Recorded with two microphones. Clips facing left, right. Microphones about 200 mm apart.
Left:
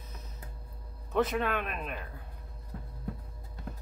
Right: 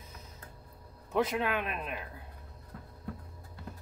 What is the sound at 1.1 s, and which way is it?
Speech, 10° right (ahead or behind).